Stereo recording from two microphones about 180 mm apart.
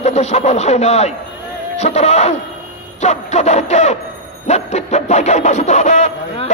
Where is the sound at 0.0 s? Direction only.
40° left (ahead or behind).